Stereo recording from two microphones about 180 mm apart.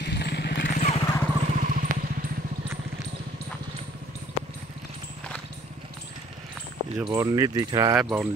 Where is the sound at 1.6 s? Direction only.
50° right (ahead or behind).